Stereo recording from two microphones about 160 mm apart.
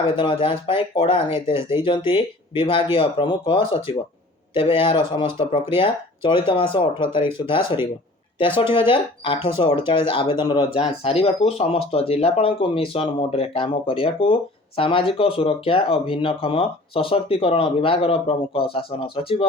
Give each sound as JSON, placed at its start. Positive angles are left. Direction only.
{"t": 0.0, "sound": "speech", "side_deg": 35}